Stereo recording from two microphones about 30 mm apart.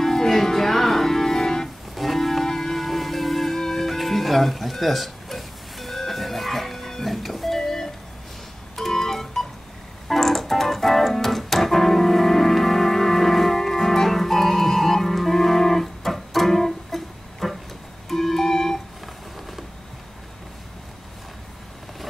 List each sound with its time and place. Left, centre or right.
0.0 s music: centre
2.0 s music: centre
7.5 s a sound: centre
8.7 s music: centre
10.0 s keyboard: centre
18.1 s music: centre